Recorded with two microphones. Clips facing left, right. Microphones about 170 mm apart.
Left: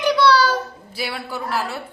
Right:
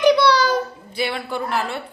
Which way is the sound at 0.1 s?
15° right (ahead or behind).